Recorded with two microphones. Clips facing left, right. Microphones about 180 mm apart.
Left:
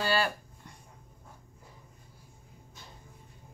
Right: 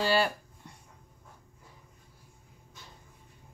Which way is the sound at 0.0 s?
25° right (ahead or behind).